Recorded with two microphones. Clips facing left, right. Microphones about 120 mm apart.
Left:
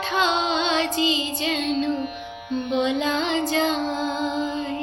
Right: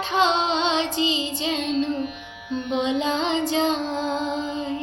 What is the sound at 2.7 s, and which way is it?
Music, 20° right (ahead or behind).